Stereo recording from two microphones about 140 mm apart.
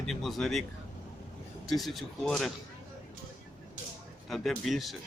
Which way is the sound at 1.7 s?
Centre (ahead or behind).